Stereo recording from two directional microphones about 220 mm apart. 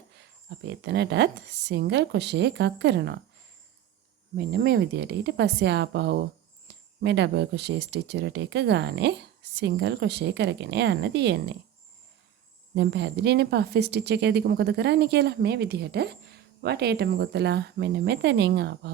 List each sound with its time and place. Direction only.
0.6 s speech: 50° right (ahead or behind)
4.4 s speech: 45° right (ahead or behind)
6.7 s a sound: 50° right (ahead or behind)
7.0 s speech: 50° right (ahead or behind)
12.7 s speech: 50° right (ahead or behind)